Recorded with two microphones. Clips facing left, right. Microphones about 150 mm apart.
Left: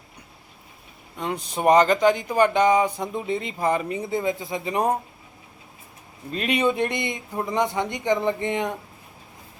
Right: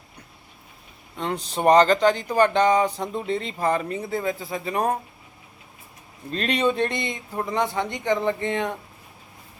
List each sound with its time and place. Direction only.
1.1 s speech: 10° left (ahead or behind)
6.3 s speech: 10° left (ahead or behind)